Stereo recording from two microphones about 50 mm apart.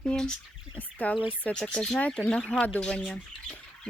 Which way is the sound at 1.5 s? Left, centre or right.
Left.